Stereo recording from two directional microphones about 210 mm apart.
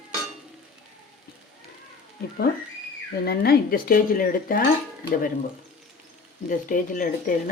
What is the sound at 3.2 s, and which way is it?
Speech, 45° left (ahead or behind).